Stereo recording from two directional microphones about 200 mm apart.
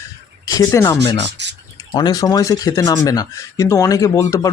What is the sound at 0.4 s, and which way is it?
Speech, 15° left (ahead or behind).